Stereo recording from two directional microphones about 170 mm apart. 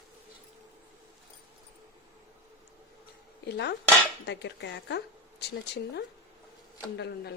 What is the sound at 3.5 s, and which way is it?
Speech, 90° left.